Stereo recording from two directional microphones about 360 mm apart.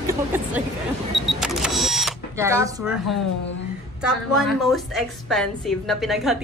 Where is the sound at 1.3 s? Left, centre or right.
Centre.